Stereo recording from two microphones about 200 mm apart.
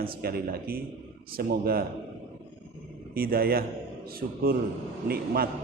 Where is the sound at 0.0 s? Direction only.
50° right (ahead or behind).